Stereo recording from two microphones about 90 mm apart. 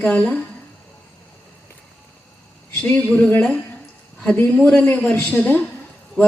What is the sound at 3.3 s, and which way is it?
A woman's voice, 15° left (ahead or behind).